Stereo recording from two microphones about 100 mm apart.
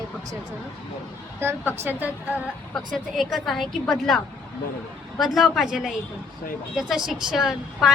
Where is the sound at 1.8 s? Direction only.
20° right (ahead or behind).